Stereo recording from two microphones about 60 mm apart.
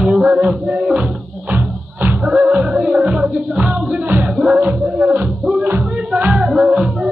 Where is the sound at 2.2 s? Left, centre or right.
Centre.